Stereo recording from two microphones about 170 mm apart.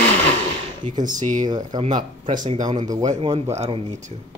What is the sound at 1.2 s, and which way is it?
Speech, 45° right (ahead or behind).